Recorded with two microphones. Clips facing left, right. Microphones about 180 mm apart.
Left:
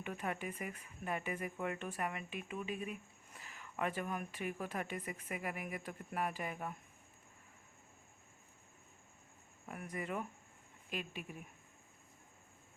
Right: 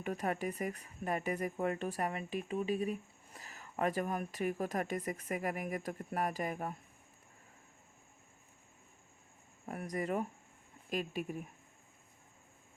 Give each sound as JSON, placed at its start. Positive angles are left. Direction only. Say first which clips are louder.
{"t": 0.0, "sound": "speech", "louder": "right 5 dB", "side_deg": -40}
{"t": 9.6, "sound": "speech", "louder": "right 6 dB", "side_deg": -40}